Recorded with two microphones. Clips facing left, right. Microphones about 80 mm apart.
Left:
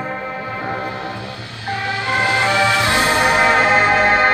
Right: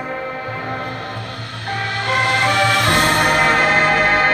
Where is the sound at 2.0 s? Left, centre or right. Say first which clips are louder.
Even; right.